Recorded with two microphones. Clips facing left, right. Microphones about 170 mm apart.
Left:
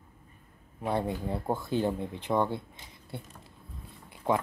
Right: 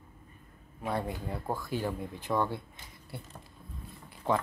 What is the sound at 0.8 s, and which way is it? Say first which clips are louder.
Speech: left 4 dB; 30° left (ahead or behind).